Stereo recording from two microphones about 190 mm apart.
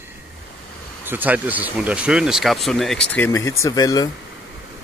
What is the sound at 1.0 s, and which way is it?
Speech, 10° right (ahead or behind).